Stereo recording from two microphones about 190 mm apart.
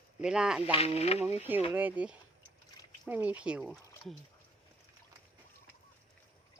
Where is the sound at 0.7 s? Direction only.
30° left (ahead or behind).